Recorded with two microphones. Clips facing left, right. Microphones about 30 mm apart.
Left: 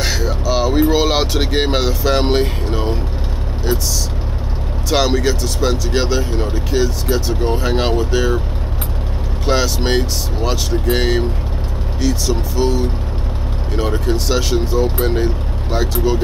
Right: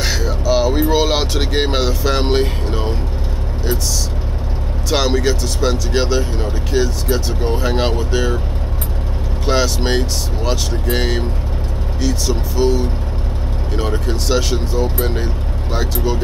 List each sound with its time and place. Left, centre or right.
0.0 s speech: centre
4.8 s speech: centre
9.5 s speech: centre